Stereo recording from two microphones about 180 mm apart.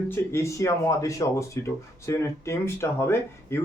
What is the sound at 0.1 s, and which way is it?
Speech, 15° left (ahead or behind).